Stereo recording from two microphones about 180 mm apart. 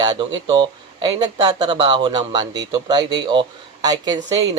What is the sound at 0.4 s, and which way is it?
Speech, 25° right (ahead or behind).